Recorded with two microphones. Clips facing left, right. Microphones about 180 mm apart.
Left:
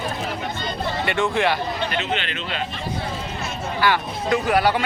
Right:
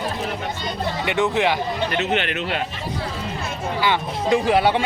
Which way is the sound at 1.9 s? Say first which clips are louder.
Right 3 dB; 55° right (ahead or behind).